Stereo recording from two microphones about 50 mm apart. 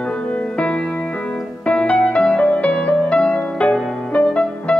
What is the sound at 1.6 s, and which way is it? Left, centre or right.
Music, left.